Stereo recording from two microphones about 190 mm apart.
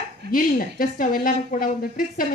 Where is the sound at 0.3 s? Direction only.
45° left (ahead or behind).